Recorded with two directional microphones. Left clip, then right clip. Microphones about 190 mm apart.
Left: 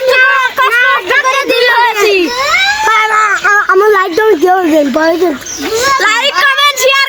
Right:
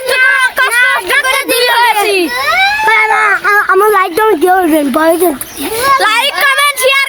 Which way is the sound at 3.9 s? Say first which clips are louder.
Left 1 dB; 20° right (ahead or behind).